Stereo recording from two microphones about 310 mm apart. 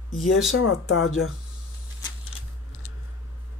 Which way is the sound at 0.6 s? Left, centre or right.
Left.